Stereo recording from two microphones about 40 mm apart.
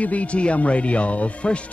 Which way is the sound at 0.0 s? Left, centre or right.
Left.